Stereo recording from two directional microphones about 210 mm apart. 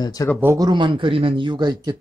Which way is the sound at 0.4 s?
15° right (ahead or behind).